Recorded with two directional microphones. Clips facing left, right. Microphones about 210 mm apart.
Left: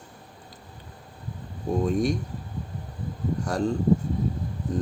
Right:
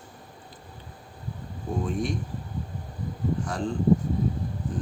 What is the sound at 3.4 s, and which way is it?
Speech, 40° left (ahead or behind).